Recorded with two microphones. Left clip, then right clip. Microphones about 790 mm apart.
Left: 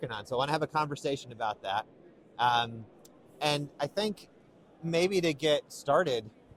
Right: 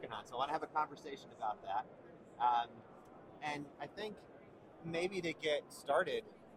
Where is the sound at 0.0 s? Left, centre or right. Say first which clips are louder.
Left 9 dB; left.